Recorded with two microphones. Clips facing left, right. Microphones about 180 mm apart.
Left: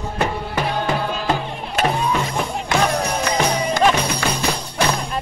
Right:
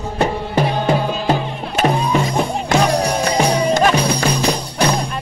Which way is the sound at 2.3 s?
35° right (ahead or behind).